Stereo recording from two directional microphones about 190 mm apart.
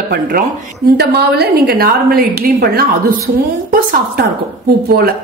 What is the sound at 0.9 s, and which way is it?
Speech, 55° right (ahead or behind).